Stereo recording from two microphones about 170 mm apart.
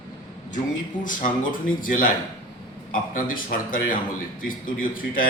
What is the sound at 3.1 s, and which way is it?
A man's voice, 55° left (ahead or behind).